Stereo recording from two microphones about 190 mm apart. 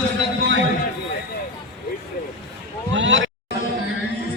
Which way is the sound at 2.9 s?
75° right (ahead or behind).